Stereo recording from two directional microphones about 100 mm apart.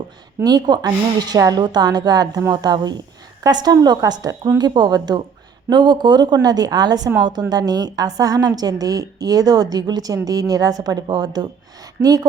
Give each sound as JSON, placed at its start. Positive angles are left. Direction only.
{"t": 0.4, "sound": "a woman's voice", "side_deg": -45}